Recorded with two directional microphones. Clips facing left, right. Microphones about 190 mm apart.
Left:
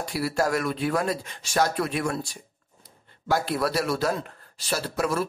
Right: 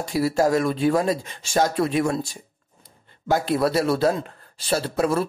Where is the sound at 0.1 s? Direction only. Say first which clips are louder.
Right 6 dB; 20° right (ahead or behind).